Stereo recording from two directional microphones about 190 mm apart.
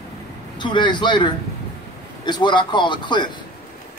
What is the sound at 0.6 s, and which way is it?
Speech, 25° left (ahead or behind).